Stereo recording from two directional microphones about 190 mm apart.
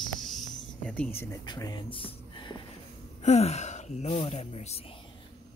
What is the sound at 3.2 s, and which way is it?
Speech, 35° left (ahead or behind).